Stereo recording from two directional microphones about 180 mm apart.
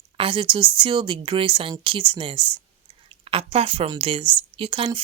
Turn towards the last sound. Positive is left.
turn(degrees=-30)  # may be behind; listen again after turning